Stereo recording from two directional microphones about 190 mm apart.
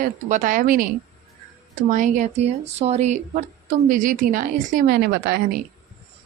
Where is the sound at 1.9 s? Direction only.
40° right (ahead or behind).